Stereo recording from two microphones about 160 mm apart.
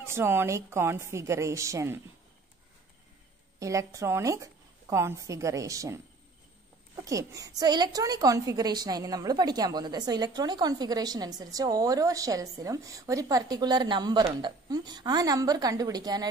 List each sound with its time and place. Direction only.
0.0 s a woman's voice: 15° right (ahead or behind)
3.5 s a woman's voice: 20° right (ahead or behind)
7.1 s a woman's voice: 20° right (ahead or behind)